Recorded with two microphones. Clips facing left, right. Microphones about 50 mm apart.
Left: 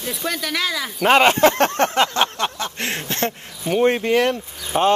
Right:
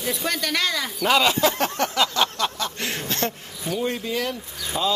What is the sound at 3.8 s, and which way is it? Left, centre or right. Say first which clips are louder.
Speech: left 10 dB; left.